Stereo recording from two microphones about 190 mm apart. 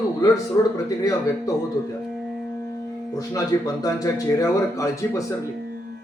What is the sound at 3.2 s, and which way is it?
Speech, 20° left (ahead or behind).